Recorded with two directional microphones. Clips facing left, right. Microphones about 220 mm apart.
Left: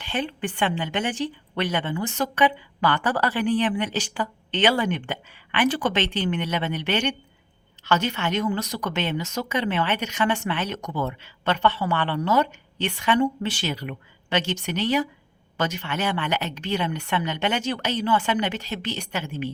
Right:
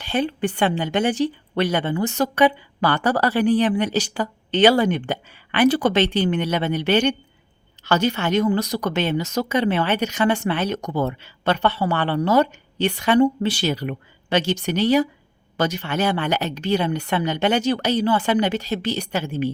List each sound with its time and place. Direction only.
0.0 s a woman's voice: 40° right (ahead or behind)